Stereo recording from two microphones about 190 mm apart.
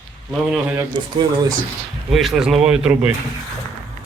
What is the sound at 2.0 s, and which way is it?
Speech, centre (ahead or behind).